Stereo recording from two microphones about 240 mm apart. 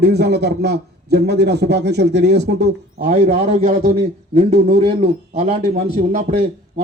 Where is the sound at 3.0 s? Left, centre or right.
Right.